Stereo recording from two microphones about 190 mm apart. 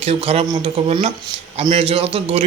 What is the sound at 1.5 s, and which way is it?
Speech, 30° right (ahead or behind).